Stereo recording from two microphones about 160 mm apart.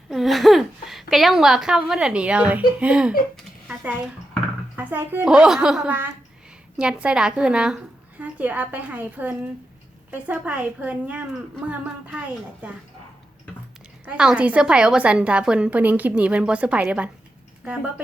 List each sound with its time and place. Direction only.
0.1 s a woman's voice: centre (ahead or behind)
3.7 s a sound: 5° right (ahead or behind)
4.8 s a woman's voice: 10° right (ahead or behind)
14.0 s a woman's voice: 5° right (ahead or behind)